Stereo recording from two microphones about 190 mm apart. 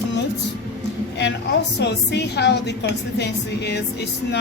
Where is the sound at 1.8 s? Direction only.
60° left (ahead or behind).